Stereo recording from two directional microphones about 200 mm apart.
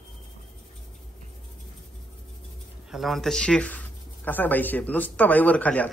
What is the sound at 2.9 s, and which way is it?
Speech, centre (ahead or behind).